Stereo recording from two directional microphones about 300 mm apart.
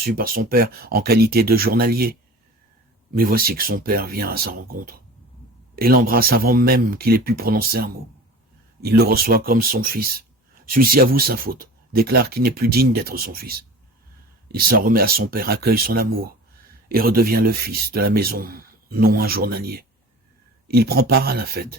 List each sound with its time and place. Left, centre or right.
0.0 s speech: right
3.2 s speech: right